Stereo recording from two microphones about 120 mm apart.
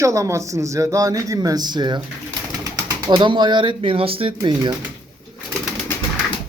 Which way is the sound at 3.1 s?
40° right (ahead or behind).